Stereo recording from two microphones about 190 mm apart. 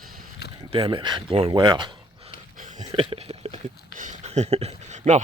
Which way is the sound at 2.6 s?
45° right (ahead or behind).